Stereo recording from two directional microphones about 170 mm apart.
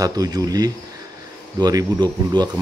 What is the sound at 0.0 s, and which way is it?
Speech, 20° right (ahead or behind).